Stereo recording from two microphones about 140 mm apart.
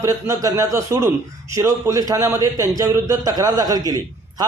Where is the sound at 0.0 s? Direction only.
20° right (ahead or behind).